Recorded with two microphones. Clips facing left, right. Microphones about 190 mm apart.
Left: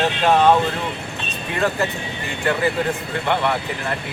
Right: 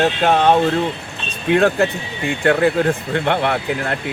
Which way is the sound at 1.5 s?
65° right (ahead or behind).